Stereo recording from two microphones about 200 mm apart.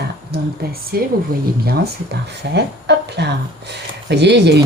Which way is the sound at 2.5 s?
55° right (ahead or behind).